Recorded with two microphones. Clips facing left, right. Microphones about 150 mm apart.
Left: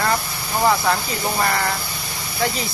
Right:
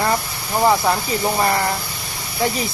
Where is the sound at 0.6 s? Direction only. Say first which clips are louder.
Right 2 dB; 15° right (ahead or behind).